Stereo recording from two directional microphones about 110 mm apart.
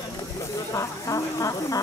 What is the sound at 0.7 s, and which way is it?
Speech, 30° left (ahead or behind).